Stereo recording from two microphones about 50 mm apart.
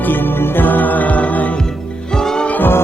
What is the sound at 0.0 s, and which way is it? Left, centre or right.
Music, left.